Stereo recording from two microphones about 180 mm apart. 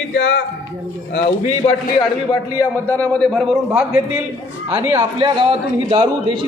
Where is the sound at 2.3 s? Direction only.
15° left (ahead or behind).